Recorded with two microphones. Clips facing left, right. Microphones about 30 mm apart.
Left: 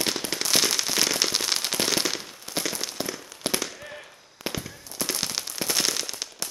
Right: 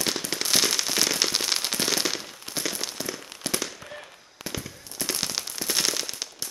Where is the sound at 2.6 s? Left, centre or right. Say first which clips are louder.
Right 2 dB; centre.